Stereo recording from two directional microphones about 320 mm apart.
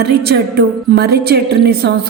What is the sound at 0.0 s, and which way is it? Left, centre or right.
Speech, right.